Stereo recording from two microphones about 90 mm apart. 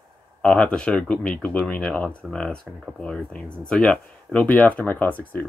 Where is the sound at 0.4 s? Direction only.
15° left (ahead or behind).